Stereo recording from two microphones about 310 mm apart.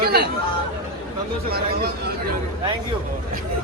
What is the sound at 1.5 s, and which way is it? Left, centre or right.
Speech, right.